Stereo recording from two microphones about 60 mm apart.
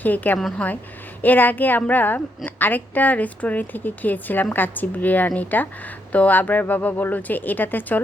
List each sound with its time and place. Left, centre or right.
0.0 s a woman's voice: left